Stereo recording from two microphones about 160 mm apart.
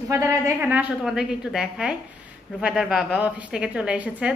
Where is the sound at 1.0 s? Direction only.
Centre (ahead or behind).